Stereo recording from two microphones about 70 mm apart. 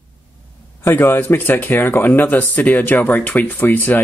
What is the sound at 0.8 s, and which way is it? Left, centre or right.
Speech, left.